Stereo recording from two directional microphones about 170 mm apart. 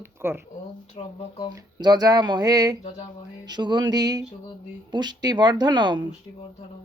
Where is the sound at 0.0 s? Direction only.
15° right (ahead or behind).